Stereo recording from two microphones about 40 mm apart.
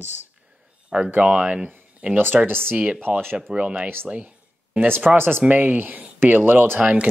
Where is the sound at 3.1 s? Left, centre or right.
Right.